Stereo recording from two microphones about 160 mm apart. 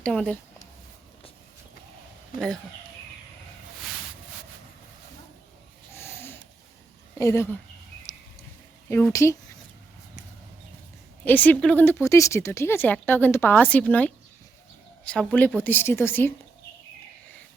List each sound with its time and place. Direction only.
0.0 s speech: 5° left (ahead or behind)
2.3 s speech: 60° left (ahead or behind)
5.9 s snoring: 15° left (ahead or behind)
7.2 s speech: 15° left (ahead or behind)
8.1 s a sound: 20° left (ahead or behind)
8.9 s speech: 10° left (ahead or behind)
11.3 s speech: 10° left (ahead or behind)